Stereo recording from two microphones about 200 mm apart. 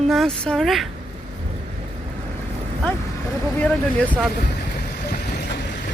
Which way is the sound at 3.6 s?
5° left (ahead or behind).